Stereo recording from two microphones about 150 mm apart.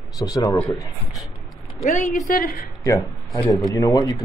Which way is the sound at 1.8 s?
50° left (ahead or behind).